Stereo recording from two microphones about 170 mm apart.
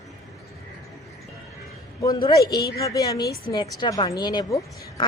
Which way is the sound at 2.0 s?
20° left (ahead or behind).